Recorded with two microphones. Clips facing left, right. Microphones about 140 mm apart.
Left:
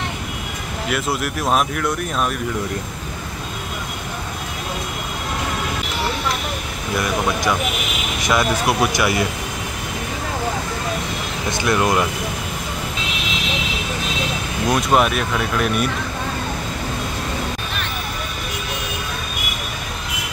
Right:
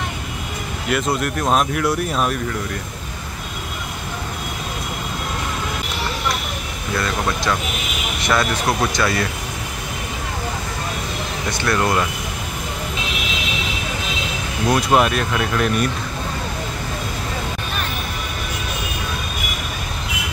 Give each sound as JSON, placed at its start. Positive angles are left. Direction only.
{"t": 0.8, "sound": "speech", "side_deg": 0}
{"t": 7.0, "sound": "speech", "side_deg": 15}
{"t": 11.6, "sound": "speech", "side_deg": 20}
{"t": 14.7, "sound": "speech", "side_deg": 0}